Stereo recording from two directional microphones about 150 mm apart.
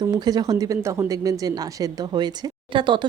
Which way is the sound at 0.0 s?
25° right (ahead or behind).